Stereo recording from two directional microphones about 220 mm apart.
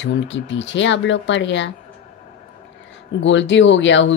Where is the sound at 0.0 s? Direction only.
55° left (ahead or behind).